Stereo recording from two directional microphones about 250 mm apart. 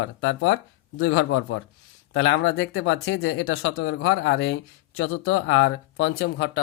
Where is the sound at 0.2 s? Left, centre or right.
Left.